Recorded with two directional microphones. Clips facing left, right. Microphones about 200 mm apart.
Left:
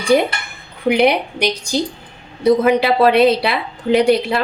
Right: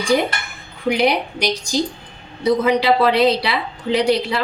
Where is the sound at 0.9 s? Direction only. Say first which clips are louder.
Left 4 dB; 60° left (ahead or behind).